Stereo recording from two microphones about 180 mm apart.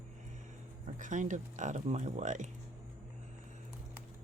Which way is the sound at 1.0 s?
45° right (ahead or behind).